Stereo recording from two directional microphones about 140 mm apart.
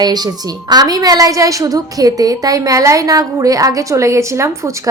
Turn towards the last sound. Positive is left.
turn(degrees=-20)  # may be behind; listen again after turning